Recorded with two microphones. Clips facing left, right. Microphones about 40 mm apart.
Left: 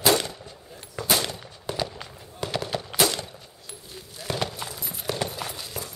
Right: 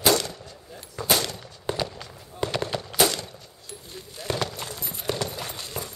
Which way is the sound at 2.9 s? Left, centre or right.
Centre.